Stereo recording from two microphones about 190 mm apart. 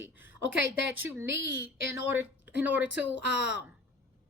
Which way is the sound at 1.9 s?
10° right (ahead or behind).